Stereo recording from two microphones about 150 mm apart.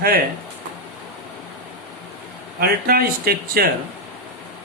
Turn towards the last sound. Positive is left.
turn(degrees=-90)